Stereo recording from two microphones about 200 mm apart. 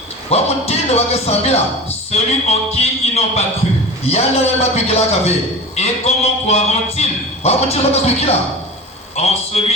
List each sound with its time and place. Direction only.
0.3 s speech: 30° left (ahead or behind)
9.5 s speech: 35° left (ahead or behind)